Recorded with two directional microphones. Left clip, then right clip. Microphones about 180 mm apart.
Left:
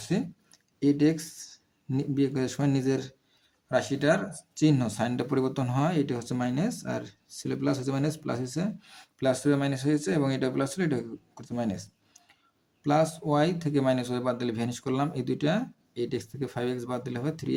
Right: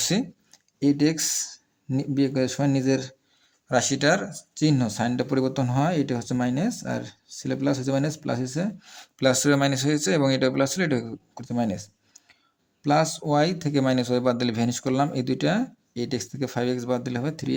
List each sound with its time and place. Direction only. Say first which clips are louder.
0.0 s speech: right 6 dB; 35° right (ahead or behind)
3.7 s speech: right 4 dB; 40° right (ahead or behind)